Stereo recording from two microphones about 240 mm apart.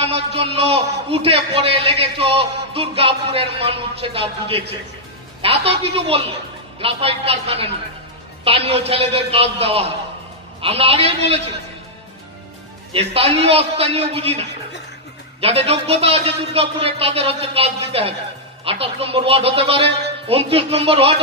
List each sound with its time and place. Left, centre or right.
0.0 s a man's voice: right
12.9 s a man's voice: right
15.4 s a man's voice: right